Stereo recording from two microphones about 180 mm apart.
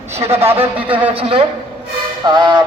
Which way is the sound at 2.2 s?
25° right (ahead or behind).